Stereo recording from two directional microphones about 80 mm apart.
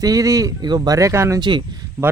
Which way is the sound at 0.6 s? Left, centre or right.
Right.